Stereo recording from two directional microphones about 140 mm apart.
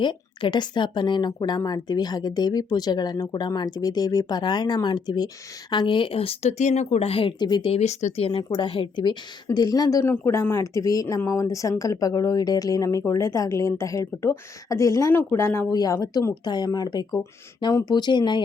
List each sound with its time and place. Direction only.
0.0 s speech: 35° left (ahead or behind)
7.7 s speech: 50° left (ahead or behind); by 18.4 s 30° left (ahead or behind)